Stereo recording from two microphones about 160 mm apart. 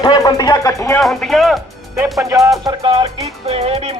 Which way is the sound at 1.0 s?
Centre (ahead or behind).